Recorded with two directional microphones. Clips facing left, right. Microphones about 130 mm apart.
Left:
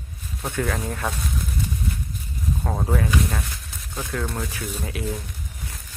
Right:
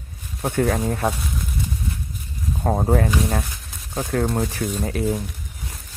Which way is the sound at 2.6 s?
35° right (ahead or behind).